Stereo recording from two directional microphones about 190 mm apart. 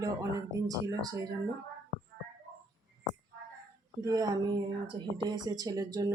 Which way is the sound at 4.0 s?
20° right (ahead or behind).